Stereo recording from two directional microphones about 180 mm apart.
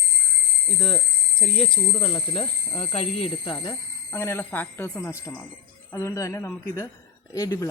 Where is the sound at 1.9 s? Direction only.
30° left (ahead or behind).